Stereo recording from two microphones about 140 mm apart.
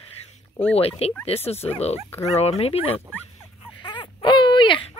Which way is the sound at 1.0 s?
45° left (ahead or behind).